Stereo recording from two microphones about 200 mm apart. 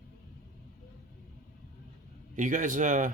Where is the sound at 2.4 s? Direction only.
40° right (ahead or behind).